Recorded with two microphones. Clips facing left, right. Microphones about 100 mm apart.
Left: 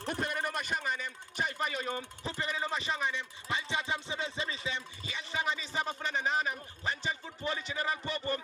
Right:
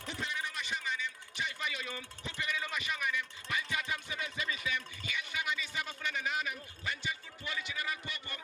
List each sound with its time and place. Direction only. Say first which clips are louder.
0.1 s speech: left 6 dB; 50° left (ahead or behind); by 8.4 s 35° left (ahead or behind)